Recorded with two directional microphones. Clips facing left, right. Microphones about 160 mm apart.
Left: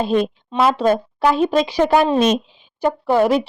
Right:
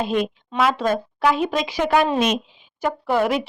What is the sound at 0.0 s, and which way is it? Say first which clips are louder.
A woman's voice: left 4 dB; 35° left (ahead or behind).